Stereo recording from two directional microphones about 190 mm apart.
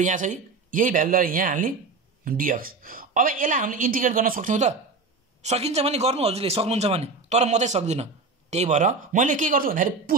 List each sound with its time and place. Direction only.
0.0 s a woman's voice: 40° right (ahead or behind)